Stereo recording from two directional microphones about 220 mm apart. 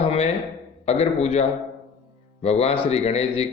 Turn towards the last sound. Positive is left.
turn(degrees=25)  # may be behind; listen again after turning